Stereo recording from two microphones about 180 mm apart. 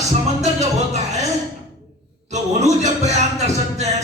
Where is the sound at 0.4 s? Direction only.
40° right (ahead or behind).